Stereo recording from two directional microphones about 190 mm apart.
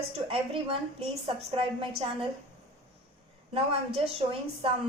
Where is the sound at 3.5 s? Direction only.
30° right (ahead or behind).